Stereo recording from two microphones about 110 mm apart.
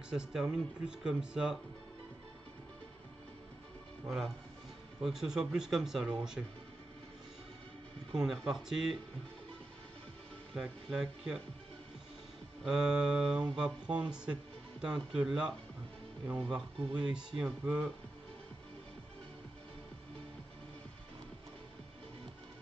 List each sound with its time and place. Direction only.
0.1 s speech: 5° right (ahead or behind)
5.0 s speech: 5° right (ahead or behind)
8.2 s speech: centre (ahead or behind)
10.6 s speech: 5° right (ahead or behind)
12.6 s speech: 5° right (ahead or behind)
16.5 s speech: 10° right (ahead or behind)